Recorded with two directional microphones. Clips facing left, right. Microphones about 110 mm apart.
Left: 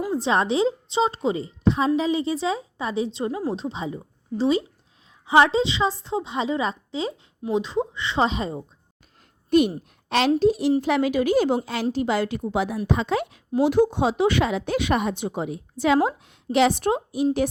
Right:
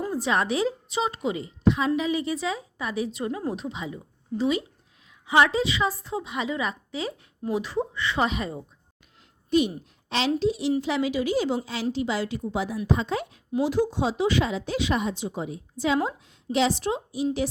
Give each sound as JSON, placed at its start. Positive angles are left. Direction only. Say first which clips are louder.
{"t": 0.1, "sound": "a woman's voice", "louder": "left 4 dB", "side_deg": 30}
{"t": 9.5, "sound": "a woman's voice", "louder": "left 4 dB", "side_deg": 55}
{"t": 13.6, "sound": "a woman's voice", "louder": "left 5 dB", "side_deg": 60}